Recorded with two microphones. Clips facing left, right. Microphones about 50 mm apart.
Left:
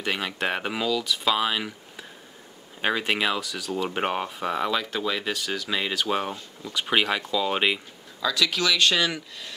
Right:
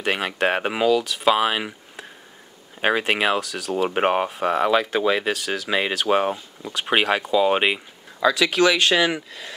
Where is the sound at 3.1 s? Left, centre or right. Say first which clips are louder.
Right 4 dB; right.